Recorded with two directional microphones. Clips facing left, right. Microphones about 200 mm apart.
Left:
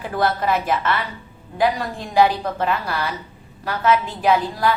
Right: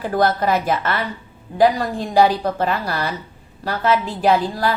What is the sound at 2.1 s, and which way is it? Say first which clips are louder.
A woman's voice: right 1 dB; 35° right (ahead or behind).